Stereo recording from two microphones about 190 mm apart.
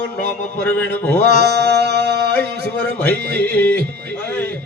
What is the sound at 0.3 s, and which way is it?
Speech, 60° right (ahead or behind).